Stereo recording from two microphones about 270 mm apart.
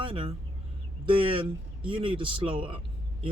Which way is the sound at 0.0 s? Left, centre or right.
Centre.